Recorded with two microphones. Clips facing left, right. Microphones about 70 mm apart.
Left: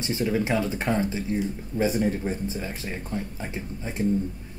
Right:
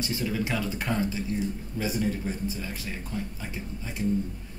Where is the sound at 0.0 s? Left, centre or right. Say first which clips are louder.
Left 4 dB; left.